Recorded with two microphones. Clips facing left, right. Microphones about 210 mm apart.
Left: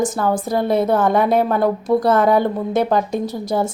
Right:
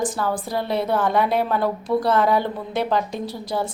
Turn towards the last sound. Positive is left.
turn(degrees=45)  # may be behind; listen again after turning